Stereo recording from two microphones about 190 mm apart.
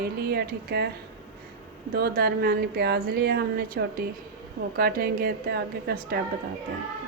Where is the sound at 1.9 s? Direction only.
55° right (ahead or behind).